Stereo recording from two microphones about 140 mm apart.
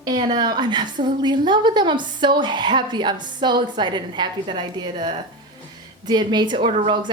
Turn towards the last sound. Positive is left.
turn(degrees=-40)  # may be behind; listen again after turning